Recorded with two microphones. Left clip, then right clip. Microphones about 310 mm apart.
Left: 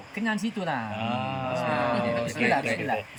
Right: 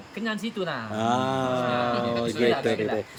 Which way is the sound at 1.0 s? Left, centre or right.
Right.